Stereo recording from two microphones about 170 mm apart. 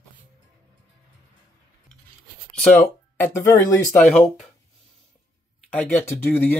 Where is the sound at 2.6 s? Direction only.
10° left (ahead or behind).